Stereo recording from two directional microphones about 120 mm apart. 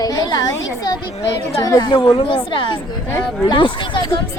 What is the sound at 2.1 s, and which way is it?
A woman's voice, 45° left (ahead or behind).